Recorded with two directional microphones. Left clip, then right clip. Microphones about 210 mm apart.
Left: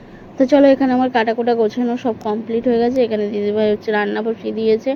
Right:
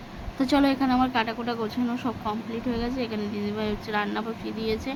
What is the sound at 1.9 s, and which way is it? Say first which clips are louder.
Speech: left 9 dB; 20° right (ahead or behind).